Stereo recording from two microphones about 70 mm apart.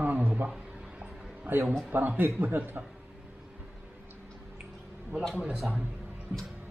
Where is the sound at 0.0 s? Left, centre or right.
Right.